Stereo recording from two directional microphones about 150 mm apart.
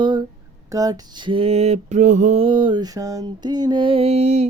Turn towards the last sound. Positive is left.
turn(degrees=-45)  # may be behind; listen again after turning